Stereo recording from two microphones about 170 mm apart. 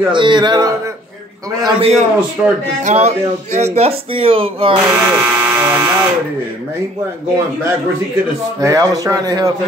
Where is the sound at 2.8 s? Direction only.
40° right (ahead or behind).